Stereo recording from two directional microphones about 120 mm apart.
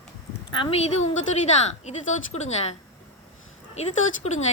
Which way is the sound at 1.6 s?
70° left (ahead or behind).